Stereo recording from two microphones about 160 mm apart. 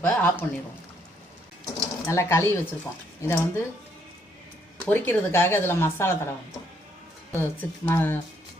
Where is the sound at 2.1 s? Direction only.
15° left (ahead or behind).